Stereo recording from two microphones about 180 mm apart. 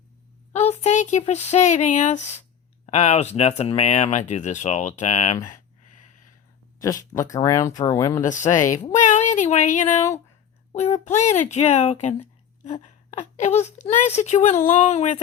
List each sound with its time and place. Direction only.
0.5 s a sound: 40° left (ahead or behind)
1.2 s speech: 40° left (ahead or behind)
6.7 s speech: 20° left (ahead or behind)
8.2 s speech: 45° left (ahead or behind)